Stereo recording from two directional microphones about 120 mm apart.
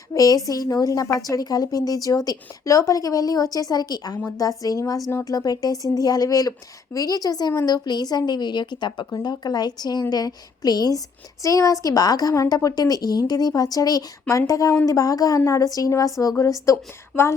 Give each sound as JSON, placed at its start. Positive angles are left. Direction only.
{"t": 0.1, "sound": "a woman's voice", "side_deg": 30}